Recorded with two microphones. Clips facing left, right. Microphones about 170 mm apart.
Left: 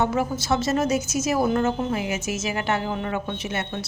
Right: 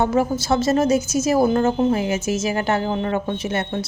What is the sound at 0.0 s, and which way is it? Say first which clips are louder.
A woman's voice: right 4 dB; 35° right (ahead or behind).